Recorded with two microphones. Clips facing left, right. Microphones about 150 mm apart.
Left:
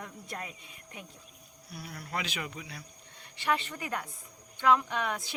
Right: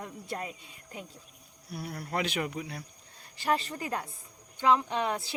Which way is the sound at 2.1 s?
50° right (ahead or behind).